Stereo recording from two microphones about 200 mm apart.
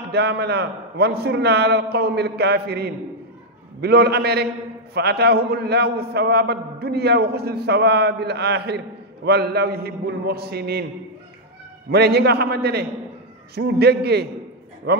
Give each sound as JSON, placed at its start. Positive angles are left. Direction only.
{"t": 0.1, "sound": "a man's voice", "side_deg": -55}
{"t": 11.9, "sound": "a man's voice", "side_deg": -55}